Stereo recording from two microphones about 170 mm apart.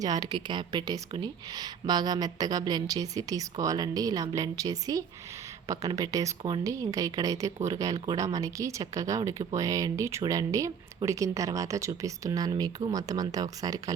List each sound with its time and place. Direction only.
0.0 s a woman's voice: 25° right (ahead or behind)